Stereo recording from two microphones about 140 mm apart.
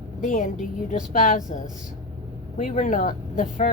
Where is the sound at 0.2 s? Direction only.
75° left (ahead or behind).